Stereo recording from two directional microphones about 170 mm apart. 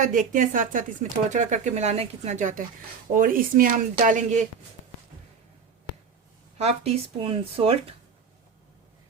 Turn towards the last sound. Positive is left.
turn(degrees=-35)  # may be behind; listen again after turning